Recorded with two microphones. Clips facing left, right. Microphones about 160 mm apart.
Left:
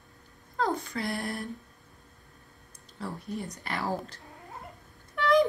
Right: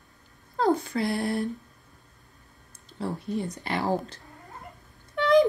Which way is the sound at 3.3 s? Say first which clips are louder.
Right 6 dB; centre (ahead or behind).